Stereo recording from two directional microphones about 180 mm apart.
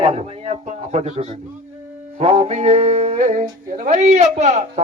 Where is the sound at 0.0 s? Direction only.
35° right (ahead or behind).